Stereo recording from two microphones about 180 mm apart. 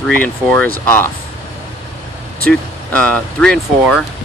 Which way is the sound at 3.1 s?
10° left (ahead or behind).